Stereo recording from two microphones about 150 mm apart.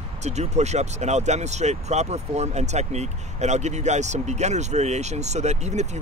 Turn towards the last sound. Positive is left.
turn(degrees=-50)  # may be behind; listen again after turning